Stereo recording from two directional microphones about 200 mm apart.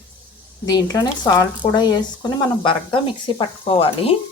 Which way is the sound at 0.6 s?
20° left (ahead or behind).